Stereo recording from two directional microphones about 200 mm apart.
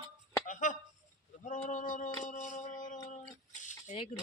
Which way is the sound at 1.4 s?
40° left (ahead or behind).